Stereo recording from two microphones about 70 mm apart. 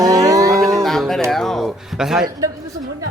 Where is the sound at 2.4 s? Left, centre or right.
Right.